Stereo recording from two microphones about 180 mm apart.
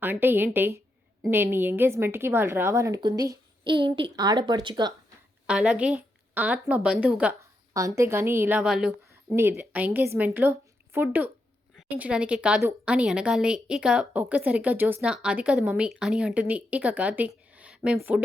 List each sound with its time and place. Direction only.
0.0 s a woman's voice: 10° right (ahead or behind)
5.5 s a woman's voice: 5° right (ahead or behind)
7.7 s a woman's voice: 20° right (ahead or behind)